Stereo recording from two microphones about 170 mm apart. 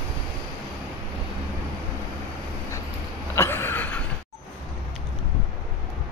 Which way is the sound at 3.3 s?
15° left (ahead or behind).